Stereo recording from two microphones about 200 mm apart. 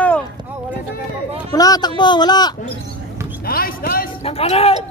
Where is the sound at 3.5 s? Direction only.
45° left (ahead or behind).